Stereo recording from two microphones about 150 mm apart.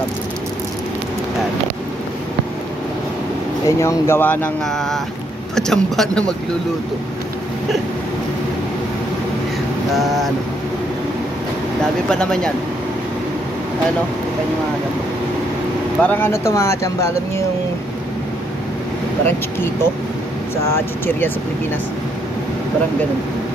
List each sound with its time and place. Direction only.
3.6 s speech: 20° left (ahead or behind); by 6.3 s 5° left (ahead or behind)
9.9 s speech: centre (ahead or behind)
12.1 s speech: 5° left (ahead or behind)
16.0 s speech: 10° left (ahead or behind)
19.2 s speech: 15° left (ahead or behind)